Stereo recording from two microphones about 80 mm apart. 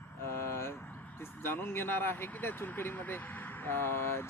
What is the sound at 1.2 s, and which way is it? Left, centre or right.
Speech, left.